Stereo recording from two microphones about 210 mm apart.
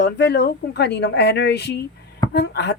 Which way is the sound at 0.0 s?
50° left (ahead or behind).